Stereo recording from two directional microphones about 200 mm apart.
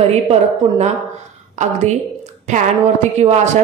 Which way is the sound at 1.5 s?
35° right (ahead or behind).